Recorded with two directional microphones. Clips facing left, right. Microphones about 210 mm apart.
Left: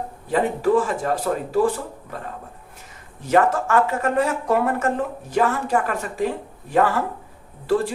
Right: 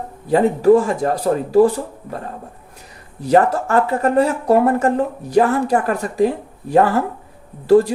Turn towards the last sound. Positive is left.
turn(degrees=-40)  # may be behind; listen again after turning